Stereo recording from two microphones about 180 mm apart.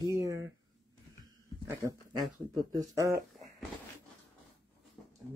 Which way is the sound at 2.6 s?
20° right (ahead or behind).